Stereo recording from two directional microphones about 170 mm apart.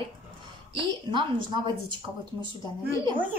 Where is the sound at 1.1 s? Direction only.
30° right (ahead or behind).